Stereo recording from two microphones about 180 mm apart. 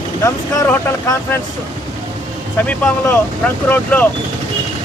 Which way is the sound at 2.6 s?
10° left (ahead or behind).